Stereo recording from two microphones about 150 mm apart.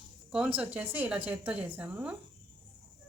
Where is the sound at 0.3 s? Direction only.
5° right (ahead or behind).